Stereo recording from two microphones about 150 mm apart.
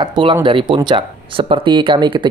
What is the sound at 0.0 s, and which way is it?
Speech, 30° right (ahead or behind).